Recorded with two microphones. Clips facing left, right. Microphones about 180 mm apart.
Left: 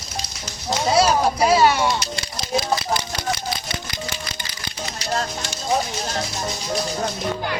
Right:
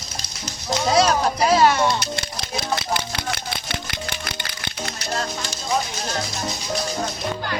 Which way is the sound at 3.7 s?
60° right (ahead or behind).